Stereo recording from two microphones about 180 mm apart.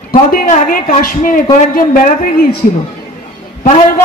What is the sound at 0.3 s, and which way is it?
A man's voice, 50° left (ahead or behind).